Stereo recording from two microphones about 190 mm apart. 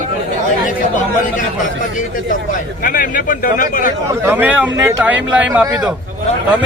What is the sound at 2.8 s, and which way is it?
Speech, 45° left (ahead or behind).